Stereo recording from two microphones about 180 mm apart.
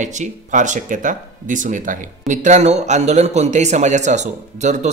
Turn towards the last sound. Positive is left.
turn(degrees=-40)  # may be behind; listen again after turning